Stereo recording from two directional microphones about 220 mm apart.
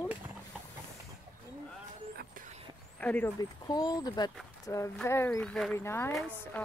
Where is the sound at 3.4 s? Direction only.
15° left (ahead or behind).